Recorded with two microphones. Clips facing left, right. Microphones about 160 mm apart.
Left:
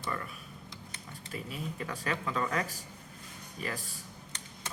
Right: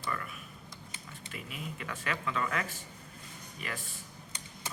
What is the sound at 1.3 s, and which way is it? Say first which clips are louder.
Speech: left 4 dB; 35° left (ahead or behind).